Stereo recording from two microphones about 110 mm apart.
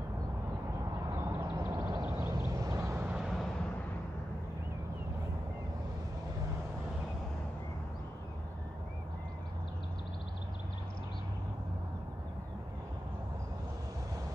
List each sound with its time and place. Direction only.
1.1 s a sound: 30° right (ahead or behind)
2.1 s vehicle: 30° right (ahead or behind)
3.1 s vehicle: 5° right (ahead or behind)